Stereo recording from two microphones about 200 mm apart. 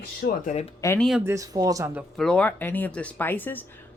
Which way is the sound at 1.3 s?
15° right (ahead or behind).